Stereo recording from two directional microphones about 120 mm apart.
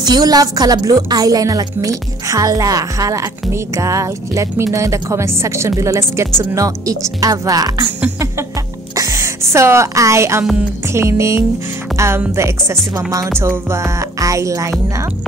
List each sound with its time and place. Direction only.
0.0 s a woman's voice: 35° right (ahead or behind)
8.9 s music: 25° right (ahead or behind)
10.9 s a woman's voice: 25° right (ahead or behind)